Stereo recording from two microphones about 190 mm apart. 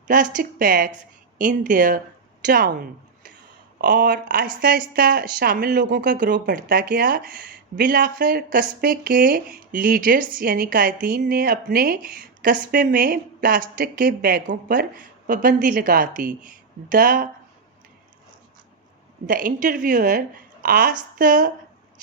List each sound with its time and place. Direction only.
0.1 s speech: 45° right (ahead or behind)
19.3 s speech: 45° right (ahead or behind)